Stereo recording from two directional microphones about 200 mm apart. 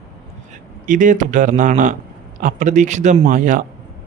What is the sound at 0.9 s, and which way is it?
Speech, 40° right (ahead or behind).